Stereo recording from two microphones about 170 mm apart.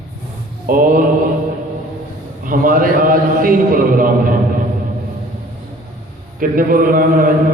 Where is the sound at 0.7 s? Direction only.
55° right (ahead or behind).